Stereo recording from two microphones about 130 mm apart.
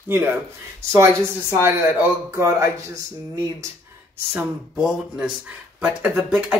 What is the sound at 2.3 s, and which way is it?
Speech, 20° right (ahead or behind).